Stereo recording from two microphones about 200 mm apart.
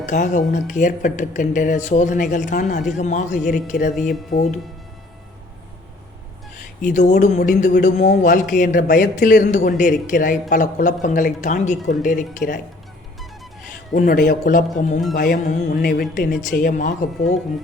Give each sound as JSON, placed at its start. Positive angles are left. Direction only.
{"t": 0.0, "sound": "speech", "side_deg": 40}
{"t": 6.8, "sound": "speech", "side_deg": 40}
{"t": 13.9, "sound": "a woman's voice", "side_deg": 45}